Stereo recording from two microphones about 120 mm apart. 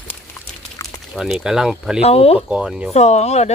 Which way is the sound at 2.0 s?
55° left (ahead or behind).